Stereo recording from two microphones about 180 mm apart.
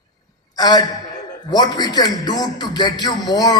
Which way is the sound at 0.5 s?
20° left (ahead or behind).